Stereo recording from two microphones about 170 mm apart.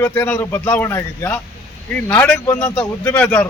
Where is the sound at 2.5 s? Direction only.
20° left (ahead or behind).